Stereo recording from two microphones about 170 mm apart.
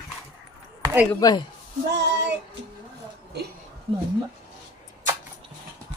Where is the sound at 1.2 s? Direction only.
25° left (ahead or behind).